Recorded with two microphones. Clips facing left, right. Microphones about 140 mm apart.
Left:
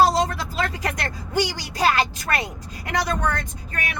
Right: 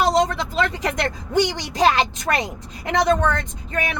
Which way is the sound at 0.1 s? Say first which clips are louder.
Right 4 dB; 20° right (ahead or behind).